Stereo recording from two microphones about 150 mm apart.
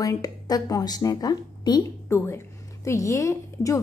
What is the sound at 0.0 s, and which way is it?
Speech, 25° left (ahead or behind).